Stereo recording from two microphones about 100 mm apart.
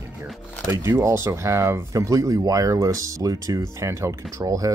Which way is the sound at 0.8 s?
30° right (ahead or behind).